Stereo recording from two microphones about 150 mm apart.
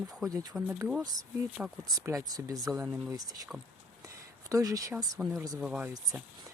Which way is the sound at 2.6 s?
10° right (ahead or behind).